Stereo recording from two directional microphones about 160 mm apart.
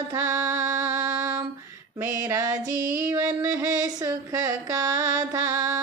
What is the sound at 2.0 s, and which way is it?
Female singing, 20° right (ahead or behind).